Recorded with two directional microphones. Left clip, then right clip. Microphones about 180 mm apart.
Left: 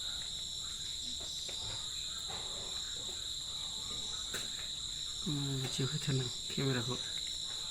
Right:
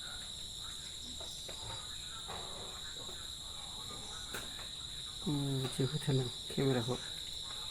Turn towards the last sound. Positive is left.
turn(degrees=30)  # may be behind; listen again after turning